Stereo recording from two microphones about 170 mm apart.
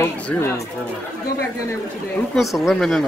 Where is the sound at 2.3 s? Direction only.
Centre (ahead or behind).